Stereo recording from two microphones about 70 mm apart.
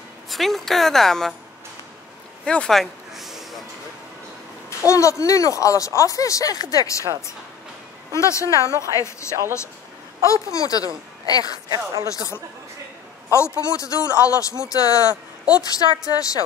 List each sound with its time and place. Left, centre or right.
0.3 s a woman's voice: centre
2.4 s speech: centre
2.7 s a sound: centre
4.6 s speech: left
8.1 s speech: left
10.3 s speech: left
11.7 s speech: right
12.1 s speech: left
15.5 s speech: left